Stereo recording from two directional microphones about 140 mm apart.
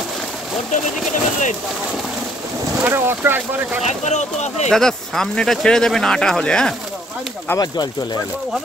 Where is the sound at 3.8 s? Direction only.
55° left (ahead or behind).